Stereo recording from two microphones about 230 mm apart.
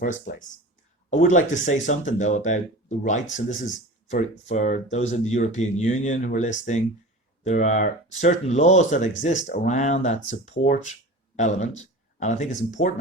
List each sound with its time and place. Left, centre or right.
0.0 s speech: left